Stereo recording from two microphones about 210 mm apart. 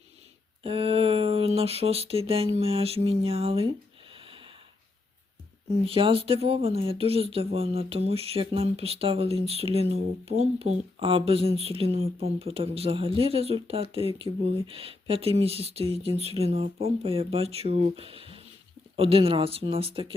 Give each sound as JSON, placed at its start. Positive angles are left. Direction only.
{"t": 0.6, "sound": "a sound", "side_deg": -25}
{"t": 2.6, "sound": "speech", "side_deg": -30}
{"t": 5.8, "sound": "speech", "side_deg": -25}